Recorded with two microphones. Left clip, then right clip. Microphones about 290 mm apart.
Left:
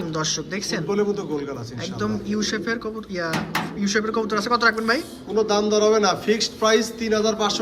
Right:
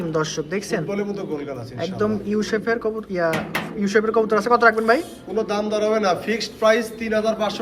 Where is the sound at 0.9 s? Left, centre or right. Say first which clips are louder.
Left 3 dB; centre.